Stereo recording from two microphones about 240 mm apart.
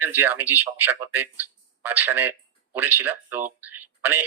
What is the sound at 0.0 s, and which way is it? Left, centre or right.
Speech, centre.